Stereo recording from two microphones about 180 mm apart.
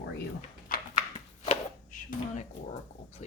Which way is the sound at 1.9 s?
45° left (ahead or behind).